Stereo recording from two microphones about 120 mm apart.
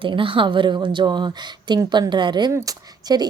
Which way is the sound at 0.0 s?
45° right (ahead or behind).